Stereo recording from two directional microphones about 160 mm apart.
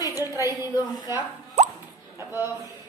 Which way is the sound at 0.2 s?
15° right (ahead or behind).